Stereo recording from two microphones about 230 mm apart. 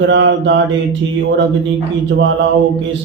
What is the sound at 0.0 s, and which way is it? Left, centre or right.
Speech, right.